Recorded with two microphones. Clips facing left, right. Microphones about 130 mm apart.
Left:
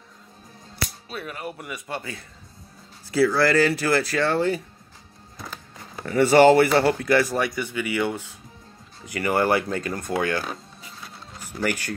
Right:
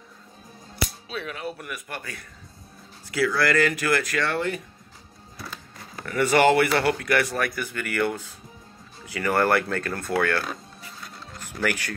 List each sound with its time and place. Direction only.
1.0 s speech: 5° left (ahead or behind)
1.6 s speech: 25° left (ahead or behind)
6.0 s speech: 30° left (ahead or behind)
7.7 s speech: 10° left (ahead or behind)
11.3 s music: 10° left (ahead or behind)